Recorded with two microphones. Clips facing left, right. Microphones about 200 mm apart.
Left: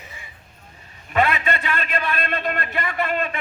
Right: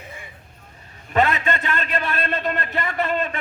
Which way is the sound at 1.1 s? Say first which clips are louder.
Right 1 dB; 45° right (ahead or behind).